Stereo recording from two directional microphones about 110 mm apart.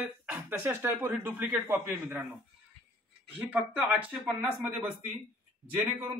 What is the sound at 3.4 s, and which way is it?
Speech, 15° right (ahead or behind).